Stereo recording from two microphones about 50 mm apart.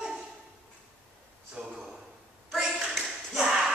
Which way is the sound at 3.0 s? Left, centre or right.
Centre.